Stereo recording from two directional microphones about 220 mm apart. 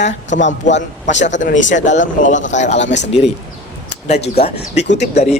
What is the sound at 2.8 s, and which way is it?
Speech, 55° left (ahead or behind).